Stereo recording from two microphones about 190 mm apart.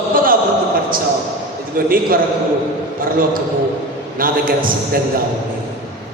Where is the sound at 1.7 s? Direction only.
50° right (ahead or behind).